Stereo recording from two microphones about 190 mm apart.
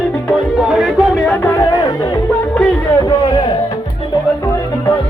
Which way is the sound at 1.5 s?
20° left (ahead or behind).